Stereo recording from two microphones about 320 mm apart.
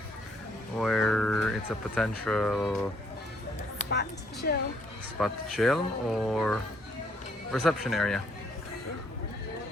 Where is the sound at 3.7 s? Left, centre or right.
Left.